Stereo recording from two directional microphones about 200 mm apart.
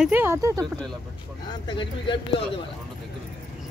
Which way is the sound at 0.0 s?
10° right (ahead or behind).